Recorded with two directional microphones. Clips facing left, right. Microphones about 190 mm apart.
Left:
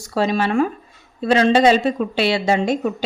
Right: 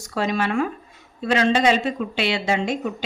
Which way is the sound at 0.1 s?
30° left (ahead or behind).